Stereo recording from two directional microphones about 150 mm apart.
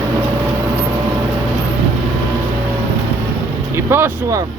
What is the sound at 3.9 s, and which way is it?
Speech, 20° right (ahead or behind).